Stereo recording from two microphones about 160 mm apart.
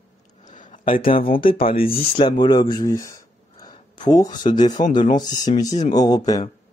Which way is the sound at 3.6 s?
25° left (ahead or behind).